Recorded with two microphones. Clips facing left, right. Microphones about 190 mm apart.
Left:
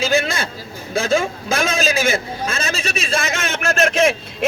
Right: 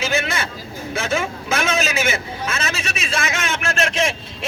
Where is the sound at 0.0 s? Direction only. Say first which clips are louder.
Left 4 dB; 35° left (ahead or behind).